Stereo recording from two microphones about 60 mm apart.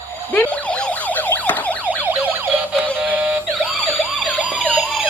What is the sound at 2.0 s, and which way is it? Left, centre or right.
Emergency vehicle, right.